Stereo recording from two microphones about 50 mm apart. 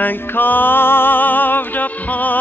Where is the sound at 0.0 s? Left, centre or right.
Left.